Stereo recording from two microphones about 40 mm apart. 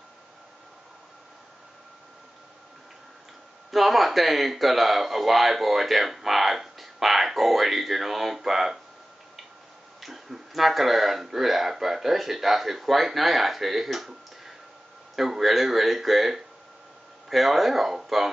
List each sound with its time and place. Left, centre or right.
3.7 s speech: centre
9.9 s speech: centre